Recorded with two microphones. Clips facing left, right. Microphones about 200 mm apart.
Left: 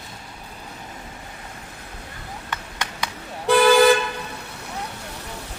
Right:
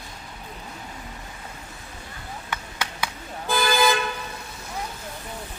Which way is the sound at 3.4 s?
70° left (ahead or behind).